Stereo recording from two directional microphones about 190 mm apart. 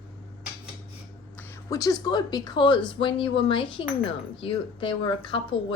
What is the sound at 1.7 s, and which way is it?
A woman's voice, 20° left (ahead or behind).